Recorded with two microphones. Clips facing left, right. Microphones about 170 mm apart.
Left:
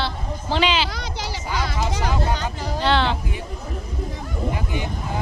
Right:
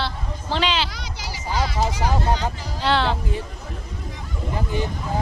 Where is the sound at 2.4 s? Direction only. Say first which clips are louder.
Left 2 dB; 65° left (ahead or behind).